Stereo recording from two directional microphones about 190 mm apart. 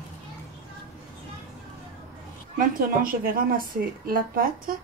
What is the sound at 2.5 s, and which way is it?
A woman's voice, 50° right (ahead or behind).